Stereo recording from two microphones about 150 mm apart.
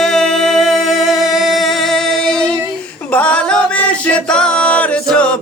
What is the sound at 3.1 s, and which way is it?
Singing, 10° left (ahead or behind).